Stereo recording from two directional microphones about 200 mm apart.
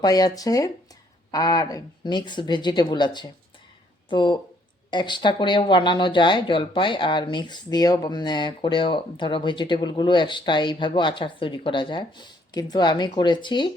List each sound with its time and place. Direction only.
0.0 s speech: 20° left (ahead or behind)